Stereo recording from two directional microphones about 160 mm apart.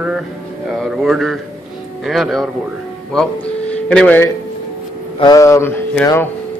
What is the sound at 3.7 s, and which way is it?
Speech, 5° left (ahead or behind).